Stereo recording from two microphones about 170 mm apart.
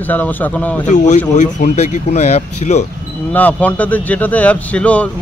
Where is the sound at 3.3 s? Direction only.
10° left (ahead or behind).